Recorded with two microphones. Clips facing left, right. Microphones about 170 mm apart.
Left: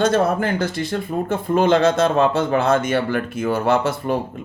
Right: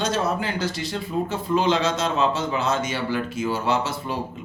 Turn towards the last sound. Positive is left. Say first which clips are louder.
# left 6 dB
turn(degrees=55)  # may be behind; listen again after turning